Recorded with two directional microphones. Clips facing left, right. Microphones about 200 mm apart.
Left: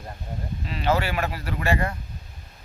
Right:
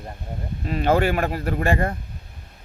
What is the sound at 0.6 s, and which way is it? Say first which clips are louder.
Speech: right 5 dB; 50° right (ahead or behind).